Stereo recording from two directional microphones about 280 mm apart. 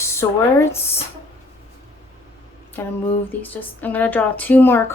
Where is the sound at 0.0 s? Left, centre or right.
Centre.